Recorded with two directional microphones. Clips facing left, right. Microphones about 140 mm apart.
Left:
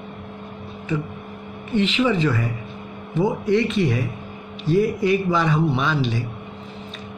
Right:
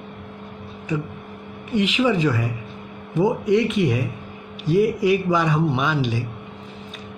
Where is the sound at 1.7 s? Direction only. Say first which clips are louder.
Even; 10° right (ahead or behind).